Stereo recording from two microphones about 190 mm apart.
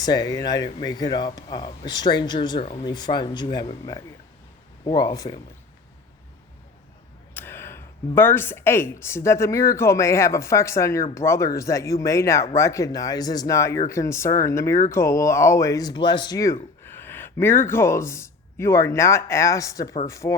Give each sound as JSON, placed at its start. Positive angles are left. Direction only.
{"t": 0.0, "sound": "speech", "side_deg": 20}
{"t": 7.3, "sound": "speech", "side_deg": 10}